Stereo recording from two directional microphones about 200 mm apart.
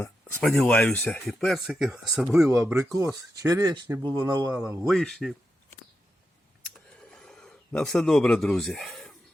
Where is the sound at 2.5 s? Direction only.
15° right (ahead or behind).